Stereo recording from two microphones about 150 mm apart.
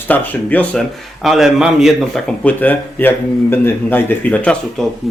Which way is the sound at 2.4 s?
10° left (ahead or behind).